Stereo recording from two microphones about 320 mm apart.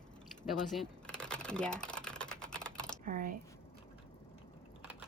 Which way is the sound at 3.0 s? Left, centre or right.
Right.